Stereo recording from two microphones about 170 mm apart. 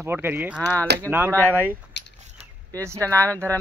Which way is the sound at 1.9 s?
90° left.